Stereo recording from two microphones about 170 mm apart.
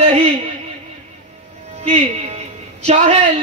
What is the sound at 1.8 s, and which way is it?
Speech, 40° right (ahead or behind).